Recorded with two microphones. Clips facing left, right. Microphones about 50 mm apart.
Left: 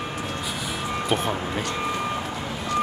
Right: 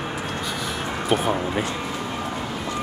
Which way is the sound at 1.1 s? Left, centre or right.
Centre.